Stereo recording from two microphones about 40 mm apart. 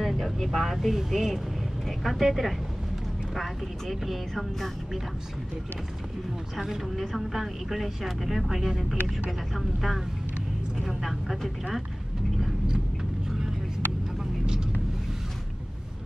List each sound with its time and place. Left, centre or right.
0.0 s speech: centre
1.9 s speech: centre
7.0 s speech: centre
14.4 s vehicle: centre